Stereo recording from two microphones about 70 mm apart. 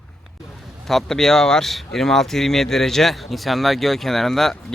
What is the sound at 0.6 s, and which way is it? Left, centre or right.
Speech, centre.